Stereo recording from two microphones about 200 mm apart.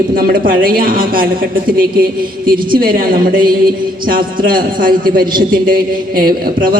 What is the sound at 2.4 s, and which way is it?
A man's voice, 45° right (ahead or behind).